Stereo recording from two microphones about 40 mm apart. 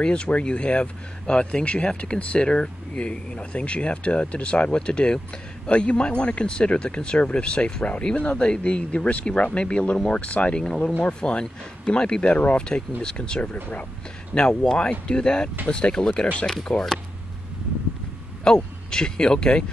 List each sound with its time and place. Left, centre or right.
0.0 s speech: left
10.2 s speech: left
11.1 s speech: left
16.7 s speech: left
18.4 s speech: centre